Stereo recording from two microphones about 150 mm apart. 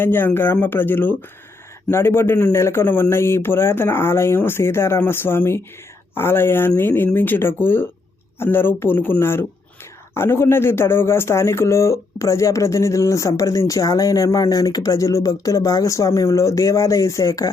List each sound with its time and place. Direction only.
0.0 s a man's voice: 15° left (ahead or behind)